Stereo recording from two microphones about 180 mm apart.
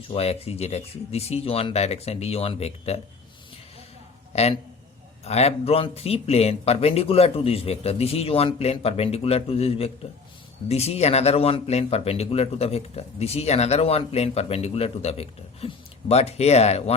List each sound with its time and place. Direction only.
0.1 s speech: 35° left (ahead or behind)
4.3 s a man's voice: 35° left (ahead or behind)